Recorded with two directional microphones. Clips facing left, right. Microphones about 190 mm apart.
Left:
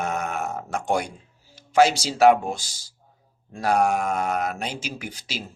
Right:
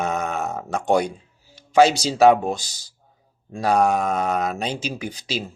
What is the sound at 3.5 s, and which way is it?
Speech, 20° right (ahead or behind).